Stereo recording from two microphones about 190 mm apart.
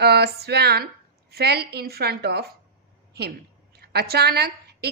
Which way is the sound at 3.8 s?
55° right (ahead or behind).